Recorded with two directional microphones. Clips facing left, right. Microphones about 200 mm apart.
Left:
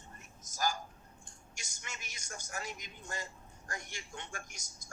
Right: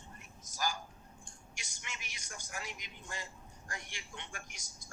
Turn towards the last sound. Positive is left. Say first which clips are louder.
# left 2 dB
turn(degrees=45)  # may be behind; listen again after turning